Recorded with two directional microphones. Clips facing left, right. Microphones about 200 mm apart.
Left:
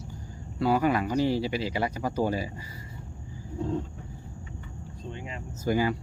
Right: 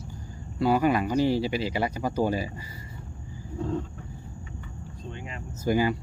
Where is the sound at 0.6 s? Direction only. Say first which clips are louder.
Right 2 dB; 10° right (ahead or behind).